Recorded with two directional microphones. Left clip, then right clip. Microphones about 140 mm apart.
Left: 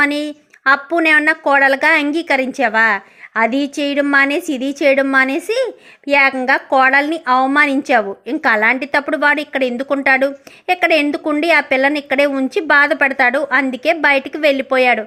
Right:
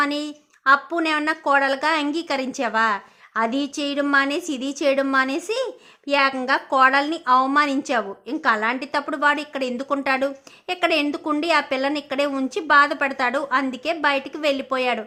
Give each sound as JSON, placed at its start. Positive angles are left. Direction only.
{"t": 0.0, "sound": "a woman's voice", "side_deg": 15}